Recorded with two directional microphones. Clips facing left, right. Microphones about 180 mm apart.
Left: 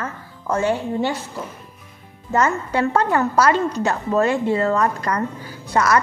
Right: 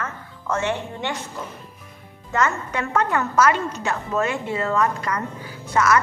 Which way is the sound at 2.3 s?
30° left (ahead or behind).